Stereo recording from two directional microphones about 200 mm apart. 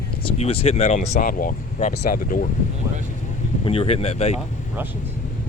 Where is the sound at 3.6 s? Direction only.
30° left (ahead or behind).